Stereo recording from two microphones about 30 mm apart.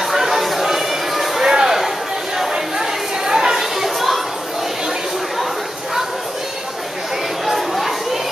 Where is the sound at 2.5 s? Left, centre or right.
Centre.